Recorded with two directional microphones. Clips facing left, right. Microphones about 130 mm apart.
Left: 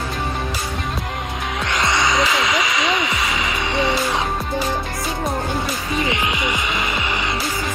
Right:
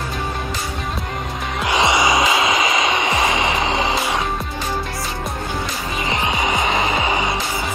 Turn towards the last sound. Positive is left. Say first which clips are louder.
# right 4 dB
turn(degrees=-30)  # may be behind; listen again after turning